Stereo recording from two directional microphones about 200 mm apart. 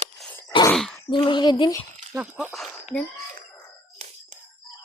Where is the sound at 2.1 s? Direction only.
10° right (ahead or behind).